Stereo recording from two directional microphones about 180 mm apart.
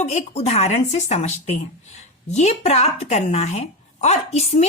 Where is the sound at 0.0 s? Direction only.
40° left (ahead or behind).